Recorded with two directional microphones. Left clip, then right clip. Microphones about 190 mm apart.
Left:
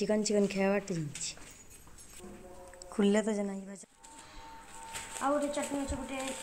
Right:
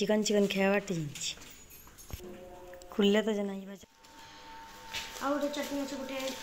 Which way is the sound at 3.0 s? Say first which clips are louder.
Right 2 dB; 10° left (ahead or behind).